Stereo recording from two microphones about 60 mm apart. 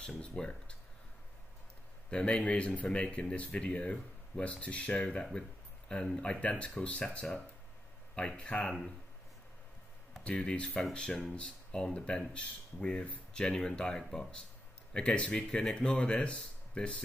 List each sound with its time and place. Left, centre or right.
0.2 s speech: centre
2.0 s speech: centre
8.1 s speech: centre
10.2 s speech: centre